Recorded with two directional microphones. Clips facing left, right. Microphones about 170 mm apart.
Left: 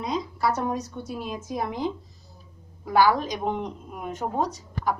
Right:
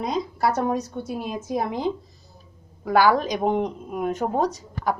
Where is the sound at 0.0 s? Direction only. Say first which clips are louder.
Right 3 dB; 55° right (ahead or behind).